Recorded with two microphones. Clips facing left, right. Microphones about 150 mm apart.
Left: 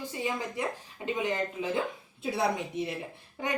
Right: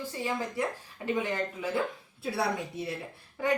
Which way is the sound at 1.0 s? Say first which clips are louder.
Even; 20° left (ahead or behind).